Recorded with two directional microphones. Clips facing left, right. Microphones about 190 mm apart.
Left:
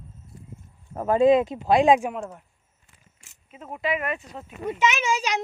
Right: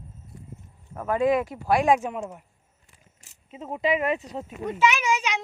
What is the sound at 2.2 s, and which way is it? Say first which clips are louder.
Speech: even; 10° right (ahead or behind).